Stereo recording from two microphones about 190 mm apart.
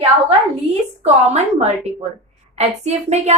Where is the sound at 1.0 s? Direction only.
35° right (ahead or behind).